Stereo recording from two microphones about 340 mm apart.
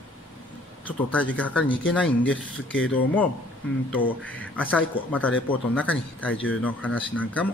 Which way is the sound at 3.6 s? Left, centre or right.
Centre.